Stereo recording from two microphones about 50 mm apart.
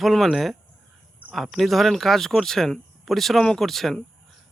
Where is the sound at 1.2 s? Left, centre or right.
Right.